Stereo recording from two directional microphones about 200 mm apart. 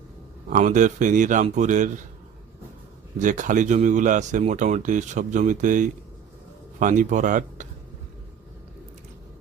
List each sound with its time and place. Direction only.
0.5 s speech: 40° right (ahead or behind)
3.2 s speech: 40° right (ahead or behind)